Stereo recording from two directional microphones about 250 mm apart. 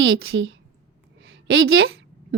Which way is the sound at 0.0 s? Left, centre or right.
Right.